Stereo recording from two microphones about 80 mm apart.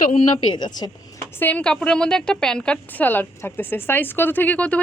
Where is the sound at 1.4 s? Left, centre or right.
Centre.